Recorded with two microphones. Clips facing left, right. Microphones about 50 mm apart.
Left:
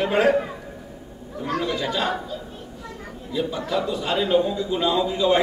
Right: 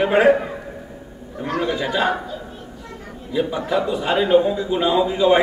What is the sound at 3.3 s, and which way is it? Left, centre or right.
A man's voice, centre.